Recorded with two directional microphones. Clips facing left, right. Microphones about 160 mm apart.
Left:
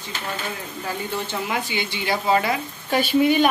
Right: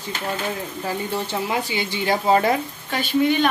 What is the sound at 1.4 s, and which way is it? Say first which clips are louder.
Speech: right 2 dB; 35° right (ahead or behind).